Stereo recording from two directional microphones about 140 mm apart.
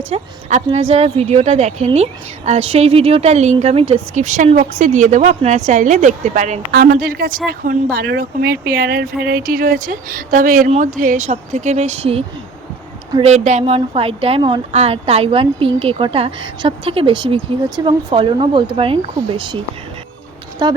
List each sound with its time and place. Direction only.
0.1 s a woman's voice: 50° right (ahead or behind); by 10.7 s 75° right (ahead or behind)
10.7 s a woman's voice: 65° right (ahead or behind); by 12.2 s 45° right (ahead or behind)
13.2 s speech: 55° right (ahead or behind); by 19.5 s 35° right (ahead or behind)
20.6 s speech: 35° right (ahead or behind)